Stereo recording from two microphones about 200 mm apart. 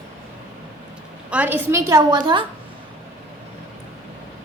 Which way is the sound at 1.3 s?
10° right (ahead or behind).